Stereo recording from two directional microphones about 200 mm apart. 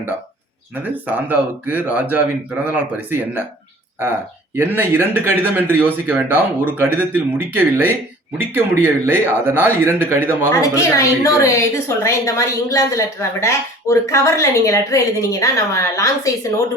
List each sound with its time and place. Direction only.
1.0 s speech: 10° right (ahead or behind)
4.5 s speech: 10° right (ahead or behind)
10.5 s a woman's voice: 15° left (ahead or behind)